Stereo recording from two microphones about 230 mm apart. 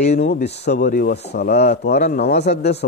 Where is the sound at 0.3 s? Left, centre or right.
Left.